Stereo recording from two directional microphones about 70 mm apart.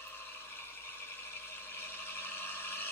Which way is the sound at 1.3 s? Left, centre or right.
Left.